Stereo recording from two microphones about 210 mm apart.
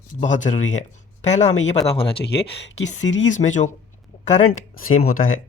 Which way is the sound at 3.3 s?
35° left (ahead or behind).